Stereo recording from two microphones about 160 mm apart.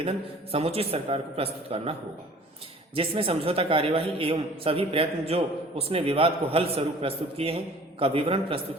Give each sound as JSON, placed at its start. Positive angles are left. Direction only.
{"t": 0.5, "sound": "a man's voice", "side_deg": -40}